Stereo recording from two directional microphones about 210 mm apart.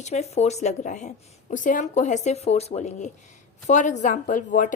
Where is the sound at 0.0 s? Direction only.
30° left (ahead or behind).